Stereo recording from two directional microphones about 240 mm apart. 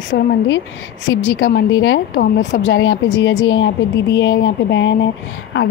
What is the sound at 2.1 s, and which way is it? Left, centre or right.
Speech, left.